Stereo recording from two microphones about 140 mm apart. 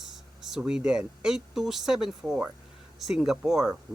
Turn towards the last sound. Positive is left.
turn(degrees=-5)  # may be behind; listen again after turning